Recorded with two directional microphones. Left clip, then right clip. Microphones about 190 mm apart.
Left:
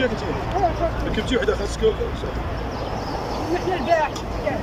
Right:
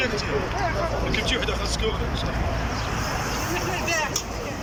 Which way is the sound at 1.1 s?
50° left (ahead or behind).